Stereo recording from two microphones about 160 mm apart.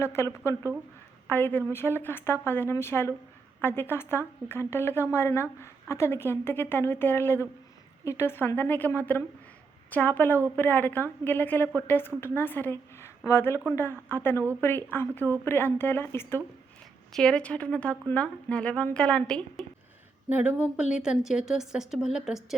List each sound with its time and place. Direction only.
0.0 s a woman's voice: 15° left (ahead or behind)
17.1 s a woman's voice: 5° left (ahead or behind)
20.3 s speech: 10° right (ahead or behind)